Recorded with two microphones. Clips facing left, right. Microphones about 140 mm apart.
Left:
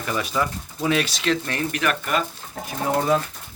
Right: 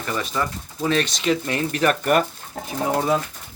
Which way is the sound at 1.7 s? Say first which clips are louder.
Right 5 dB; 35° right (ahead or behind).